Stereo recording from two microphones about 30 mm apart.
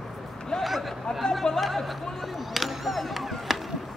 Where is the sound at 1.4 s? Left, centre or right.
Left.